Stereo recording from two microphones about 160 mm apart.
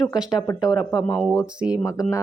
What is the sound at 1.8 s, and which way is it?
Speech, 20° left (ahead or behind).